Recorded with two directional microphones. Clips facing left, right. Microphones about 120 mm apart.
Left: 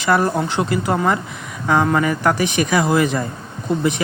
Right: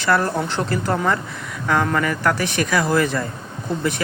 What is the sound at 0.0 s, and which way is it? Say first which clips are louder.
Speech: left 2 dB; 15° left (ahead or behind).